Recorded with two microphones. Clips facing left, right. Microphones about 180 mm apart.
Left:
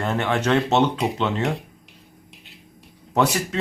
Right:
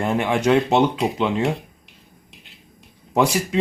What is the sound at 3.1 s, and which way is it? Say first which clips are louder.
Speech: right 2 dB; 10° right (ahead or behind).